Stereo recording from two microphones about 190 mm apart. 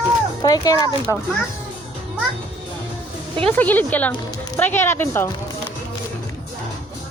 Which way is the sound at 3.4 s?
10° left (ahead or behind).